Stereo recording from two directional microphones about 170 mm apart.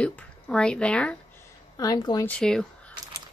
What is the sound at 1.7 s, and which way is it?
Speech, 20° left (ahead or behind).